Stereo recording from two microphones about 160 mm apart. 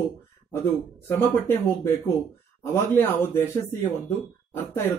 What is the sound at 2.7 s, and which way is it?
Speech, 15° left (ahead or behind).